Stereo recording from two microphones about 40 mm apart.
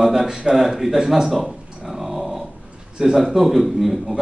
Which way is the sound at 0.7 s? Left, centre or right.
Centre.